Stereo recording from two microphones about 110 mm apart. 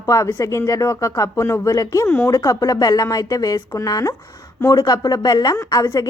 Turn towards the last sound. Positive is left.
turn(degrees=30)  # may be behind; listen again after turning